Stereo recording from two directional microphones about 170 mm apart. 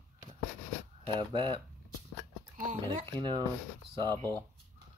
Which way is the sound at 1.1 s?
25° right (ahead or behind).